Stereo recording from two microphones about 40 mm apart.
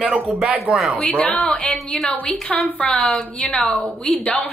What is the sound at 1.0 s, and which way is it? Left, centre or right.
Speech, left.